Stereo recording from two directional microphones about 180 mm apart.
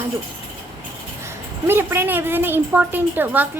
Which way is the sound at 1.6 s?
10° right (ahead or behind).